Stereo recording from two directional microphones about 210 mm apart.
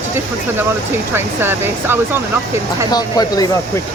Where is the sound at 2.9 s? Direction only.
20° left (ahead or behind).